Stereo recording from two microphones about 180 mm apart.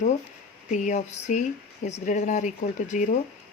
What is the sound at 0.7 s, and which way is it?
Speech, 45° left (ahead or behind).